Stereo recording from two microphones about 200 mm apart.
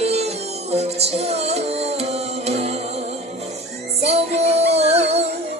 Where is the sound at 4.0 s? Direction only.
30° right (ahead or behind).